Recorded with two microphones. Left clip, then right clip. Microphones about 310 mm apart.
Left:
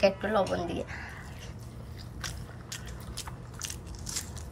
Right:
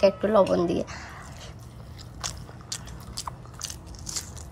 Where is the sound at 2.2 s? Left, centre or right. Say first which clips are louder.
Right 5 dB; centre.